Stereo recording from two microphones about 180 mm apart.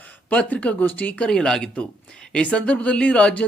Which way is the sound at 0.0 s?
10° left (ahead or behind).